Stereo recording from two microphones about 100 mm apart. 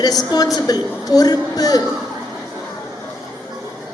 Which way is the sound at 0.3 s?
40° left (ahead or behind).